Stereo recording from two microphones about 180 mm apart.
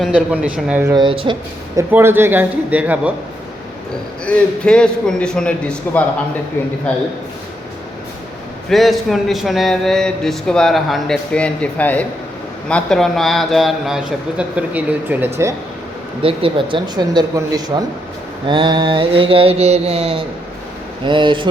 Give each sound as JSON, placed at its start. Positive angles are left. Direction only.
{"t": 0.0, "sound": "a man's voice", "side_deg": -5}
{"t": 0.9, "sound": "mantra", "side_deg": -30}
{"t": 1.7, "sound": "a man's voice", "side_deg": -15}
{"t": 4.3, "sound": "a man's voice", "side_deg": 5}
{"t": 8.7, "sound": "a man's voice", "side_deg": 0}
{"t": 16.2, "sound": "mantra", "side_deg": -30}